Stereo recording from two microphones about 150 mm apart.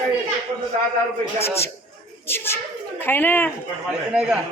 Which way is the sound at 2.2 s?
15° left (ahead or behind).